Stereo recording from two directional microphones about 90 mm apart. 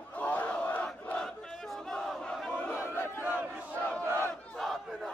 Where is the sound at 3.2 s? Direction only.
15° right (ahead or behind).